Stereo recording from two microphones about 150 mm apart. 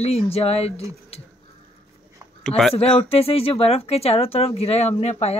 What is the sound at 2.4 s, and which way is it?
Speech, 5° left (ahead or behind).